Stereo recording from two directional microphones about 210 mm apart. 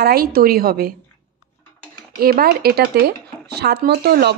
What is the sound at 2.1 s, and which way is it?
A woman's voice, 45° right (ahead or behind).